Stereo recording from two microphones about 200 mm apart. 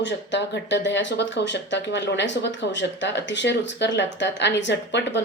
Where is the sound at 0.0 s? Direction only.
60° left (ahead or behind).